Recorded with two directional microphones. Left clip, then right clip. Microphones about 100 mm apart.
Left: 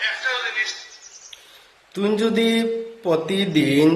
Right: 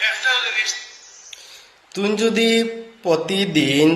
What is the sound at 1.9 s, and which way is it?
A man's voice, 25° left (ahead or behind).